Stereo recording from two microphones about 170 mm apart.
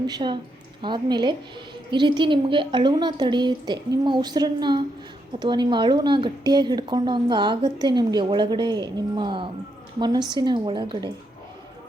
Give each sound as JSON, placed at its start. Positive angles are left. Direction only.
{"t": 0.1, "sound": "a woman's voice", "side_deg": -25}